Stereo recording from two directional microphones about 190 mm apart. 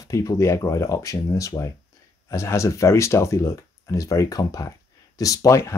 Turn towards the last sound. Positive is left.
turn(degrees=15)  # may be behind; listen again after turning